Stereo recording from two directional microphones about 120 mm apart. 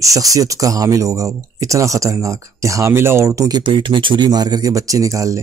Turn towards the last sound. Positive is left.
turn(degrees=-25)  # may be behind; listen again after turning